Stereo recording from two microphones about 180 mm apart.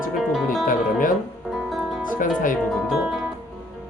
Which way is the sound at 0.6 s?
50° left (ahead or behind).